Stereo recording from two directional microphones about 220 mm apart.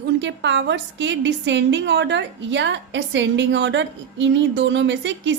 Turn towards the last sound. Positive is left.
turn(degrees=-55)  # may be behind; listen again after turning